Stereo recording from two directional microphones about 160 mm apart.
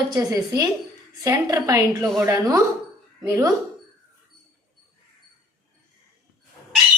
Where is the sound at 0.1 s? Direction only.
25° right (ahead or behind).